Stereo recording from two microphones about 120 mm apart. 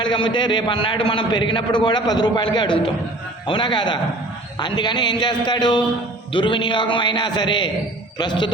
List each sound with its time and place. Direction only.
0.0 s a man's voice: 45° left (ahead or behind)